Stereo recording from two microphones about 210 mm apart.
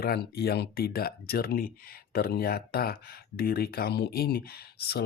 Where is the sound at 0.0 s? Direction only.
45° left (ahead or behind).